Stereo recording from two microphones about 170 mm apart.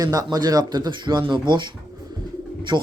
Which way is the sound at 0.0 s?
20° right (ahead or behind).